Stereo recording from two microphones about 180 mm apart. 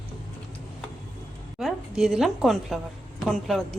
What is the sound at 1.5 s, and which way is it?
A woman's voice, centre (ahead or behind).